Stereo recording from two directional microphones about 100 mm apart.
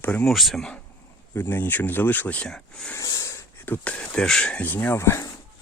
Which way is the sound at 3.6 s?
15° left (ahead or behind).